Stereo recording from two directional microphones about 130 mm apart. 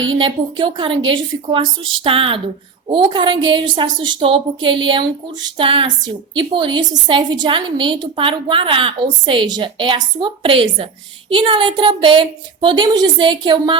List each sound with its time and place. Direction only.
0.2 s a woman's voice: 40° right (ahead or behind)